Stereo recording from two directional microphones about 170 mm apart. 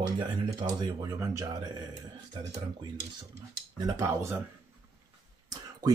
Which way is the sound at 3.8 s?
20° right (ahead or behind).